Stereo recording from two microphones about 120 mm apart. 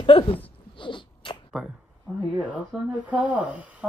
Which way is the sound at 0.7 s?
45° left (ahead or behind).